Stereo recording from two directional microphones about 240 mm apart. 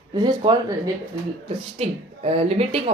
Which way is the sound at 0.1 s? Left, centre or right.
Centre.